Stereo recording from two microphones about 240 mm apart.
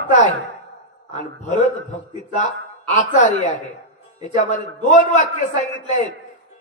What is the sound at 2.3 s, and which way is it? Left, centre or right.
A man's voice, left.